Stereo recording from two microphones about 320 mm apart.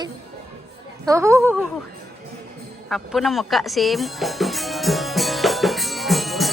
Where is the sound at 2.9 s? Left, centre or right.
Centre.